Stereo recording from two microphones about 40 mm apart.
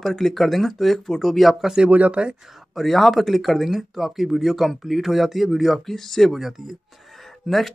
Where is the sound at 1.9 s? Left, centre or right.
Right.